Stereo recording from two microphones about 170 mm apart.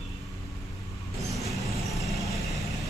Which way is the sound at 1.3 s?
Centre (ahead or behind).